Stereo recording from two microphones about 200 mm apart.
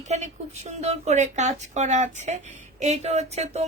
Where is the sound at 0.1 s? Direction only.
35° right (ahead or behind).